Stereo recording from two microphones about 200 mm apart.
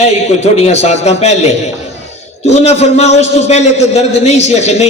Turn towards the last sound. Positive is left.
turn(degrees=35)  # may be behind; listen again after turning